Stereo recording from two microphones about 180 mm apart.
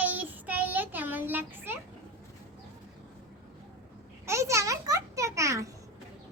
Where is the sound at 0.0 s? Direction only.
10° right (ahead or behind).